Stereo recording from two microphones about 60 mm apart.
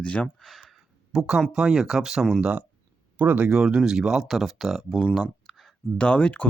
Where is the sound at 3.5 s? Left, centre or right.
Centre.